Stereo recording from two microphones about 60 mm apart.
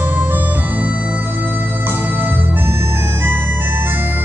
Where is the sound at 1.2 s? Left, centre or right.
Right.